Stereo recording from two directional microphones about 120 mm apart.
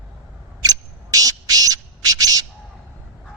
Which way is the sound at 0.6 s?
30° right (ahead or behind).